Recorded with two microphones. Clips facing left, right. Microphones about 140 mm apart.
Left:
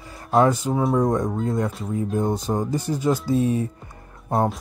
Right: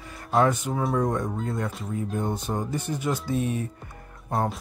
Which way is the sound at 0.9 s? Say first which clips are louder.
Left 5 dB; 35° left (ahead or behind).